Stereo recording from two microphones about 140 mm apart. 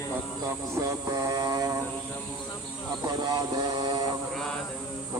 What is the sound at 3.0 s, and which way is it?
Speech, 30° right (ahead or behind).